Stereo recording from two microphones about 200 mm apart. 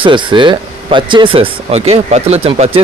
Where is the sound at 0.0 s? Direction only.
25° right (ahead or behind).